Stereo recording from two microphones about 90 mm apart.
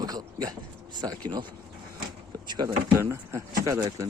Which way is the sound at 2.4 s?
55° right (ahead or behind).